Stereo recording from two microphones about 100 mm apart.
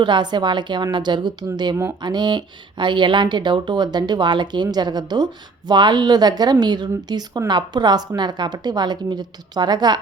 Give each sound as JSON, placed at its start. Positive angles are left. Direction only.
{"t": 0.0, "sound": "speech", "side_deg": -50}